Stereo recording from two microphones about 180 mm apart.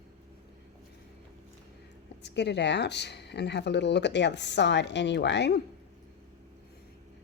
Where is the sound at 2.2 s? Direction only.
70° left (ahead or behind).